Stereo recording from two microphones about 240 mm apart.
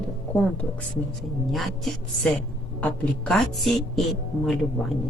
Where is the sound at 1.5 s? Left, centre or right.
Centre.